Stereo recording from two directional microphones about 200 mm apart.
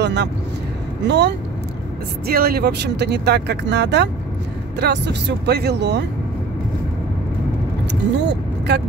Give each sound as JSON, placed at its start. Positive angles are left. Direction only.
{"t": 0.0, "sound": "speech", "side_deg": -60}
{"t": 2.2, "sound": "speech", "side_deg": -50}
{"t": 7.9, "sound": "speech", "side_deg": -55}